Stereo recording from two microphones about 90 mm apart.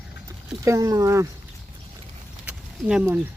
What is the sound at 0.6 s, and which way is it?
Speech, 35° right (ahead or behind).